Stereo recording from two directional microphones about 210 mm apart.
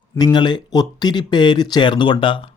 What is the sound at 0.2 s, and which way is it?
Speech, 20° left (ahead or behind).